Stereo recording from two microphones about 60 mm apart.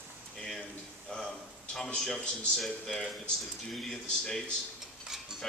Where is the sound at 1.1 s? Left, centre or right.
Centre.